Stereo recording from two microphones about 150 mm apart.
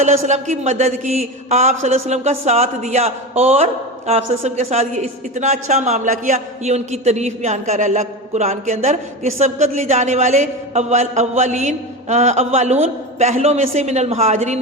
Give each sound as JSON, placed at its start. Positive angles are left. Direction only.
{"t": 0.0, "sound": "a man's voice", "side_deg": -50}